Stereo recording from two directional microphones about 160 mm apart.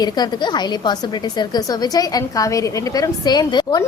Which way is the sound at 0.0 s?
25° left (ahead or behind).